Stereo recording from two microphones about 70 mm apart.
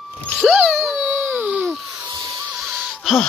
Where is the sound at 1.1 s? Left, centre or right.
Right.